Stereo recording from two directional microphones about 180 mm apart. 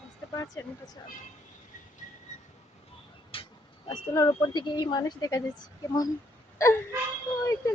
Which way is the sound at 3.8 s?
20° left (ahead or behind).